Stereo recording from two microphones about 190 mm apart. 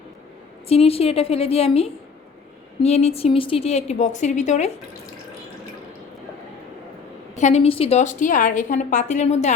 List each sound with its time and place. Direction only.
0.7 s a woman's voice: 30° left (ahead or behind)
7.3 s a woman's voice: 35° left (ahead or behind)